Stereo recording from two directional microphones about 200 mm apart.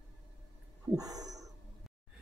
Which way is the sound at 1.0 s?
20° right (ahead or behind).